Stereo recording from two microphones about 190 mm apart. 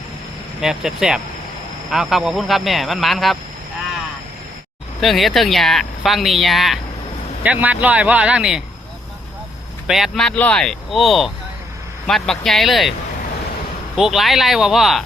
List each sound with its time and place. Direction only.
0.6 s speech: 5° right (ahead or behind)
4.9 s speech: centre (ahead or behind)
9.8 s speech: centre (ahead or behind)
13.9 s speech: centre (ahead or behind)